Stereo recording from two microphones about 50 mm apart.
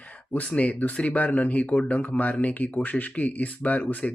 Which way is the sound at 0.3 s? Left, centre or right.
Left.